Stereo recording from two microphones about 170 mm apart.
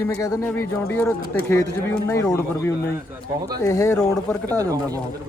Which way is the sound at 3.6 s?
15° left (ahead or behind).